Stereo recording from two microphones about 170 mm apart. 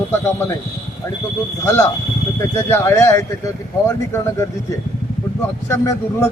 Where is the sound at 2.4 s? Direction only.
15° left (ahead or behind).